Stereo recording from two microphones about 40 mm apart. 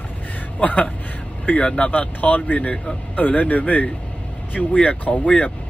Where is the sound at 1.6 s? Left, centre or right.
Left.